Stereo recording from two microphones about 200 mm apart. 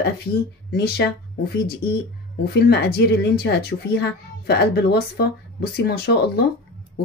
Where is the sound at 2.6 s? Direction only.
55° left (ahead or behind).